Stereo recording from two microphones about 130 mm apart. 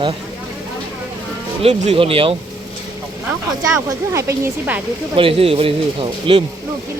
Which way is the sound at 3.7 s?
20° right (ahead or behind).